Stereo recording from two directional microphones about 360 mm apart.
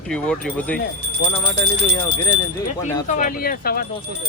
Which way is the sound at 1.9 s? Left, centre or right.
Centre.